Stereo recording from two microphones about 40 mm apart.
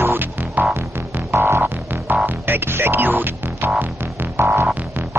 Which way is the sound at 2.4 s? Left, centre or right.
Right.